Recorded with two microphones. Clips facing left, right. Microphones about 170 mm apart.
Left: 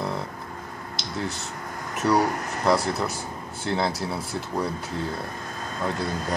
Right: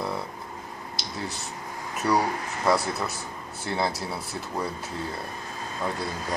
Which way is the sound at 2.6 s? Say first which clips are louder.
Left 2 dB; centre (ahead or behind).